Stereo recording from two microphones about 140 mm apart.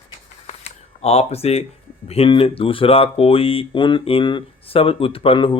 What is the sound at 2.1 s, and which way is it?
Speech, 45° left (ahead or behind).